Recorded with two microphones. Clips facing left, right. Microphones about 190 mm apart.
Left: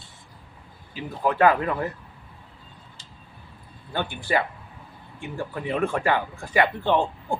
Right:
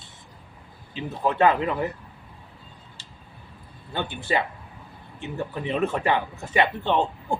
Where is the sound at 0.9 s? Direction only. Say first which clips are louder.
Even; 25° right (ahead or behind).